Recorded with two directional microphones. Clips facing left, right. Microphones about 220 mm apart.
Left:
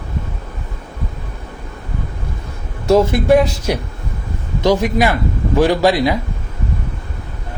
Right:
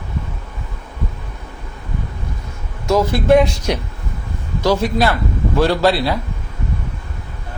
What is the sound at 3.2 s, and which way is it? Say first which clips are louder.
A man's voice: even; 5° left (ahead or behind).